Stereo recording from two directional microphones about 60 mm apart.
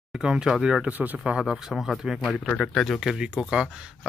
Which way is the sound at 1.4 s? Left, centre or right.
Centre.